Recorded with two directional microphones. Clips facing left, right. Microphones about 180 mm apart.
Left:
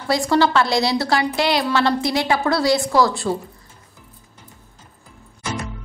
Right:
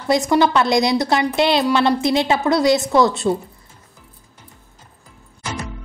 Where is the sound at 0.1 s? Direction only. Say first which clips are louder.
Right 2 dB; 20° right (ahead or behind).